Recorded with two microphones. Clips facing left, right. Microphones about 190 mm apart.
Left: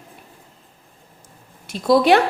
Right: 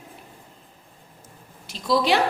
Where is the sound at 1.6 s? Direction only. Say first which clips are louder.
Left 7 dB; 55° left (ahead or behind).